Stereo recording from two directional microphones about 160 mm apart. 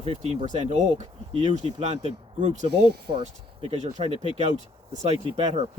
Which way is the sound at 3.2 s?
40° right (ahead or behind).